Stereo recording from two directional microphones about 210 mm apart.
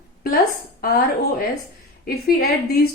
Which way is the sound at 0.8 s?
45° left (ahead or behind).